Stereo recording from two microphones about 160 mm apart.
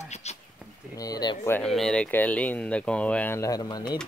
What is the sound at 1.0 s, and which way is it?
Speech, 25° left (ahead or behind).